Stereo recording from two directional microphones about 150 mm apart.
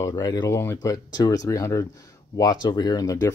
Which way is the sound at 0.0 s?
25° left (ahead or behind).